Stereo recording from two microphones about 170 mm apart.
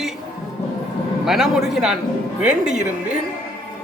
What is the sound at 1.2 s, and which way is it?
Speech, centre (ahead or behind).